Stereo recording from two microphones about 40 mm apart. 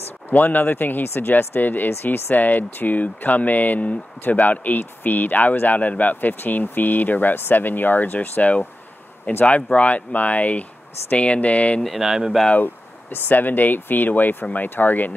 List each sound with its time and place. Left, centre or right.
0.3 s speech: left
1.0 s speech: left
1.6 s speech: left
12.0 s speech: centre
12.5 s speech: left